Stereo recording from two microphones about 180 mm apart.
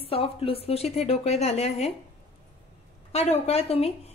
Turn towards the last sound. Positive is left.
turn(degrees=35)  # may be behind; listen again after turning